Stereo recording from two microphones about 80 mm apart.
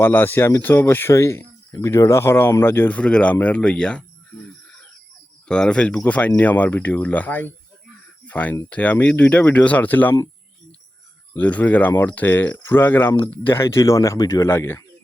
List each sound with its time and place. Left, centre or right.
0.0 s speech: left
3.4 s a sound: centre
5.5 s speech: centre
11.3 s speech: centre; by 14.4 s left
14.4 s speech: left